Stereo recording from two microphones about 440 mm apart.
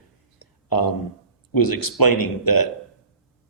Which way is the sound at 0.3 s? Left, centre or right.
Left.